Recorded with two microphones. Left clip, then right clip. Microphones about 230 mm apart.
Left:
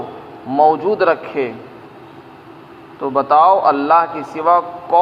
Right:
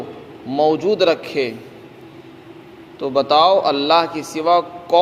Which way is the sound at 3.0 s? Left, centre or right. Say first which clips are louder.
Left 2 dB; right.